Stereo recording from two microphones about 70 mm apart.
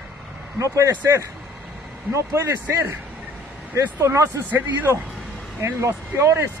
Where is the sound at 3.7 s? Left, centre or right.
Right.